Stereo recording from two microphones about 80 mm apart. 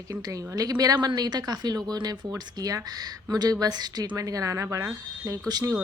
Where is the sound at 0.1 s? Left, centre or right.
Right.